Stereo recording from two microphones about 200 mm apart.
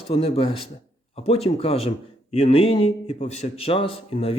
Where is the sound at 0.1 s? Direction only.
30° left (ahead or behind).